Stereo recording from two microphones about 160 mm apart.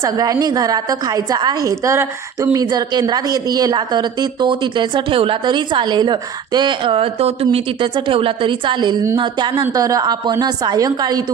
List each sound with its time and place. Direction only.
0.0 s a woman's voice: 20° right (ahead or behind)